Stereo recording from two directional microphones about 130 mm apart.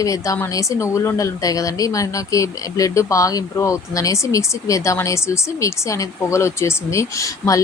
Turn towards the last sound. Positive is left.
turn(degrees=25)  # may be behind; listen again after turning